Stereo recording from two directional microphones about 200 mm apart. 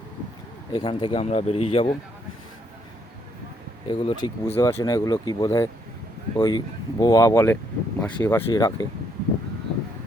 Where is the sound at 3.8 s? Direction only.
25° left (ahead or behind).